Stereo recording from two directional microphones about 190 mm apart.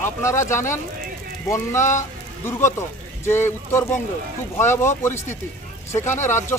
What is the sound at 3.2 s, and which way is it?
Speech, 10° left (ahead or behind).